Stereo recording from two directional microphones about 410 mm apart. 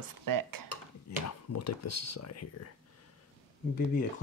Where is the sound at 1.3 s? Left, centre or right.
Left.